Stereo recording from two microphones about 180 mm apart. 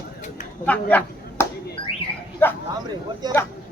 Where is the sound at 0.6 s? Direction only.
10° left (ahead or behind).